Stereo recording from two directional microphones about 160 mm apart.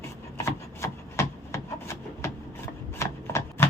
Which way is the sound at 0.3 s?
15° left (ahead or behind).